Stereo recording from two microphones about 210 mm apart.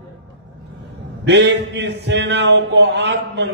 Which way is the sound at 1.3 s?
55° right (ahead or behind).